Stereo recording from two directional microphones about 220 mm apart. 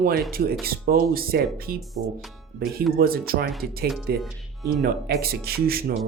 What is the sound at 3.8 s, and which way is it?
Speech, centre (ahead or behind).